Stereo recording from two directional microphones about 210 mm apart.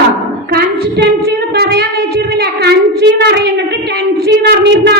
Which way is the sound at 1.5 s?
50° right (ahead or behind).